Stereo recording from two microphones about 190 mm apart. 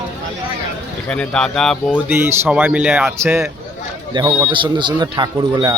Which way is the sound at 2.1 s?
10° right (ahead or behind).